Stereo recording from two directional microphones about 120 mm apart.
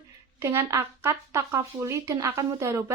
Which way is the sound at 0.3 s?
20° right (ahead or behind).